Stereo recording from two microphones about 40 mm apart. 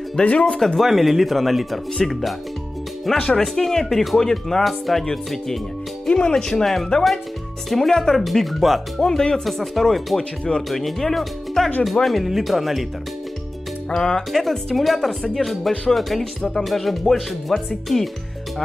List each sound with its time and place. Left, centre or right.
0.1 s speech: left
0.7 s speech: centre
3.3 s speech: centre
6.0 s speech: left
6.3 s speech: centre
9.0 s speech: centre
9.4 s speech: centre
13.8 s speech: centre